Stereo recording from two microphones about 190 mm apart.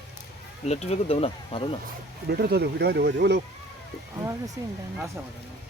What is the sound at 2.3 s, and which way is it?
Speech, 60° right (ahead or behind).